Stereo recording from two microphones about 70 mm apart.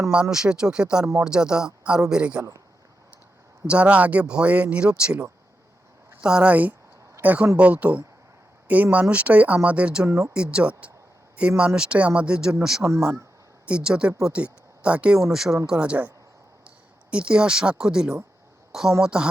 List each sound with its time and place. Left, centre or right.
0.1 s speech: centre
3.7 s speech: centre
10.1 s speech: right
10.3 s speech: centre
12.8 s speech: right
13.7 s speech: centre
15.3 s speech: centre